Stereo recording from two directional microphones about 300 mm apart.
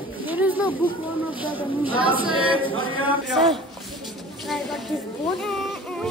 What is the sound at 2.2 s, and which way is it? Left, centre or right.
A capella, centre.